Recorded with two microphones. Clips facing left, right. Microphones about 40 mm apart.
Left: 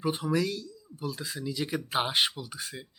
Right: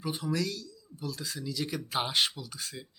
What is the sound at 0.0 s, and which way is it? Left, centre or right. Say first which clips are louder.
Speech: left 4 dB; left.